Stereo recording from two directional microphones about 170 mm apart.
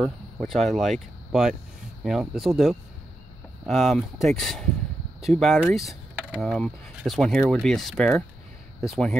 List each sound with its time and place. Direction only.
0.4 s speech: centre (ahead or behind)